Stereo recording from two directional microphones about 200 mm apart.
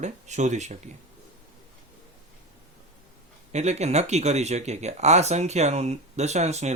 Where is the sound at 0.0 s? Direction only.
35° right (ahead or behind).